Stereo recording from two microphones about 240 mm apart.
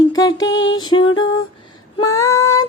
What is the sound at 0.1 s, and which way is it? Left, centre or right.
Music, centre.